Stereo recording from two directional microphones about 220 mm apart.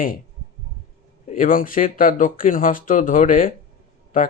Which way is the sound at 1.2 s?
40° left (ahead or behind).